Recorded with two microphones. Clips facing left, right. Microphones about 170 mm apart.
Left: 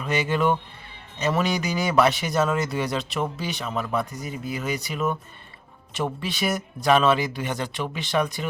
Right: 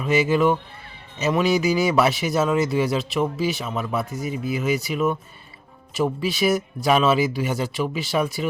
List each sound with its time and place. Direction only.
0.0 s speech: 5° right (ahead or behind)